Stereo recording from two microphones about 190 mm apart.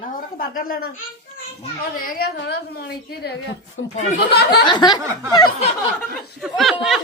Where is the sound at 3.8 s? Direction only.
90° left.